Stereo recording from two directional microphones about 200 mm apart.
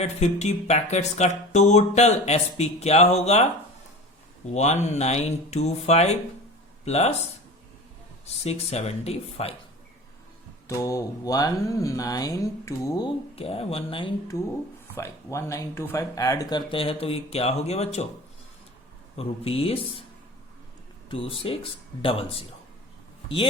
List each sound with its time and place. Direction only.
0.0 s speech: 35° left (ahead or behind)
4.4 s speech: 35° left (ahead or behind)
8.4 s speech: 30° left (ahead or behind)
10.7 s mantra: 15° left (ahead or behind)
13.3 s speech: 30° left (ahead or behind)
14.9 s speech: 15° left (ahead or behind); by 18.1 s 30° left (ahead or behind)
19.1 s speech: 30° left (ahead or behind)
21.1 s speech: 25° left (ahead or behind)